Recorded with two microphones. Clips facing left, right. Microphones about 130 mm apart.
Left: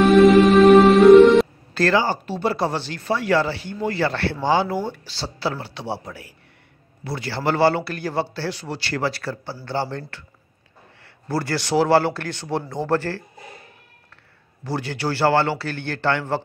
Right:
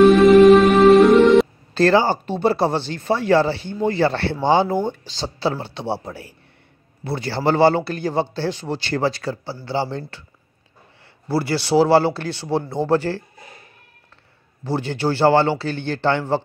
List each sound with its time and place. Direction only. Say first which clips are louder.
0.0 s music: right 3 dB; centre (ahead or behind)
1.7 s speech: right 4 dB; 30° right (ahead or behind)
11.2 s speech: right 3 dB; 10° right (ahead or behind)
14.6 s speech: right 4 dB; 20° right (ahead or behind)